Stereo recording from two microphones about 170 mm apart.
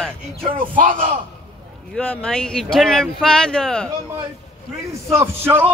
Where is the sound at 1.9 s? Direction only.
5° left (ahead or behind).